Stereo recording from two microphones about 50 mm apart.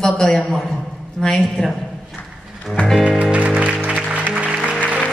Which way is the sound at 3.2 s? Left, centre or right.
Right.